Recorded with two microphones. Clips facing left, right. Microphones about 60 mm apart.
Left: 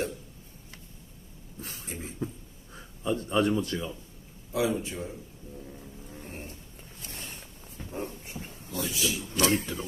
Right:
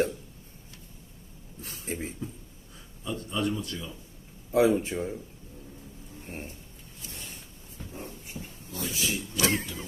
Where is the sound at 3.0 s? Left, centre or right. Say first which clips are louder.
Left 5 dB; left.